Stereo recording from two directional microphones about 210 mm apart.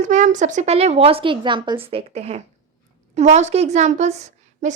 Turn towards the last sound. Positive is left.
turn(degrees=-35)  # may be behind; listen again after turning